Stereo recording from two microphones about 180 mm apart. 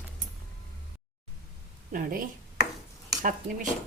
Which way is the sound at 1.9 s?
50° right (ahead or behind).